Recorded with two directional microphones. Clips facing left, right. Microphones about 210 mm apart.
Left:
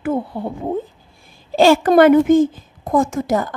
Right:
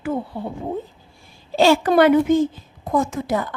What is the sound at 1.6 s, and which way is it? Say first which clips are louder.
A woman's voice: left 3 dB; 50° left (ahead or behind).